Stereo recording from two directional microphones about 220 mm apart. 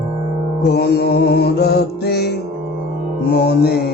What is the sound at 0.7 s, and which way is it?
Music, 50° left (ahead or behind).